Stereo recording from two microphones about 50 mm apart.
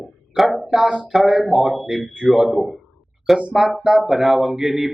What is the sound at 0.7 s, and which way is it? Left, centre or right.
Speech, centre.